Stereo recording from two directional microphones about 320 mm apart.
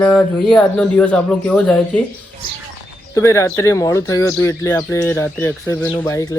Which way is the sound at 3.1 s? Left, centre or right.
Centre.